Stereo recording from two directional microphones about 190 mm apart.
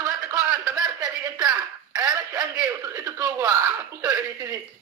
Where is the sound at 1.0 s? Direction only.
20° right (ahead or behind).